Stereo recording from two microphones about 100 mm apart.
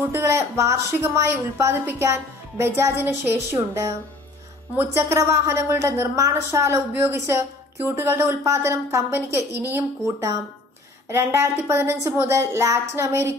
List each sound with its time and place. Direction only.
0.0 s a woman's voice: 25° right (ahead or behind)
11.1 s a woman's voice: 25° right (ahead or behind)